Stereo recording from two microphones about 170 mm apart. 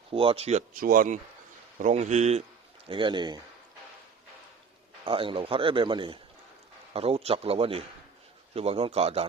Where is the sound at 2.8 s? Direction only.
30° right (ahead or behind).